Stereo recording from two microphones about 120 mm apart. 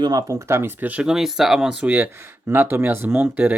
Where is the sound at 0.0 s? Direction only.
30° right (ahead or behind).